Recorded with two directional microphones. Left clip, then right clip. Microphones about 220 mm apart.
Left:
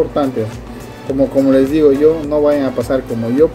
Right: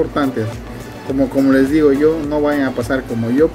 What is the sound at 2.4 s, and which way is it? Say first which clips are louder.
Speech: left 4 dB; centre (ahead or behind).